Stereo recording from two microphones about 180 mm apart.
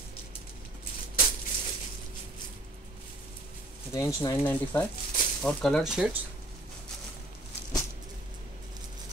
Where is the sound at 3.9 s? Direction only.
15° left (ahead or behind).